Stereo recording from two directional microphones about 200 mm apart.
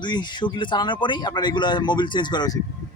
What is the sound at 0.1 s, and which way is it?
Speech, 25° left (ahead or behind).